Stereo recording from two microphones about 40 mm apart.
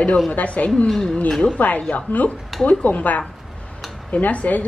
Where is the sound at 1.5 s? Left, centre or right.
Left.